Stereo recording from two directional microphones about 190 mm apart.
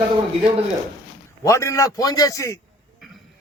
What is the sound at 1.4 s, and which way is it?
A man's voice, 15° left (ahead or behind).